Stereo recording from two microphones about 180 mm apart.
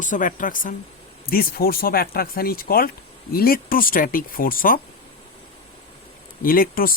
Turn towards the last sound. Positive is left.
turn(degrees=50)  # may be behind; listen again after turning